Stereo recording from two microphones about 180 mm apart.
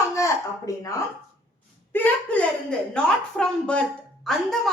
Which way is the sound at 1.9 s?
10° left (ahead or behind).